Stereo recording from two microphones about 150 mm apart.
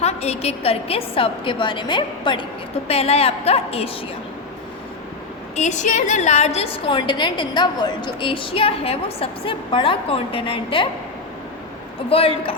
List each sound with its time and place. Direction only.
0.0 s a woman's voice: 45° left (ahead or behind)
2.8 s a woman's voice: 40° left (ahead or behind)
5.5 s a woman's voice: 55° left (ahead or behind); by 10.8 s 35° left (ahead or behind)
12.0 s a woman's voice: 40° left (ahead or behind)